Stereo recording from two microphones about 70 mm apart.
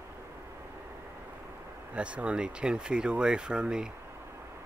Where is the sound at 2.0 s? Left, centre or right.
Centre.